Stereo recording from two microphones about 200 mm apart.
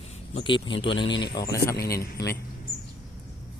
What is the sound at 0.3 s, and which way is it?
Speech, 25° left (ahead or behind).